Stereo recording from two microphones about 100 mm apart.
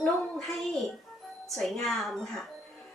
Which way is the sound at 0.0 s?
5° left (ahead or behind).